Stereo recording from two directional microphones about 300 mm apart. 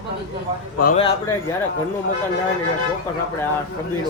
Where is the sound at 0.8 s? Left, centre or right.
Left.